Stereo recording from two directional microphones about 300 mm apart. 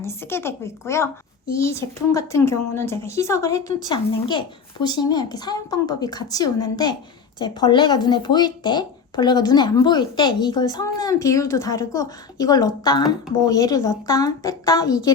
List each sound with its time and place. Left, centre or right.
0.0 s speech: centre